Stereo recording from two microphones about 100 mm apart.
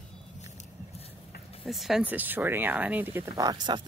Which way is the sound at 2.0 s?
20° right (ahead or behind).